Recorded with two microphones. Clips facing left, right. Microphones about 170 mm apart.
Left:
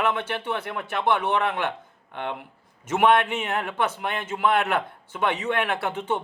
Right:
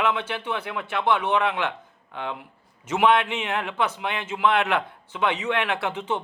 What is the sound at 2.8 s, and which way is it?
A man's voice, 50° left (ahead or behind).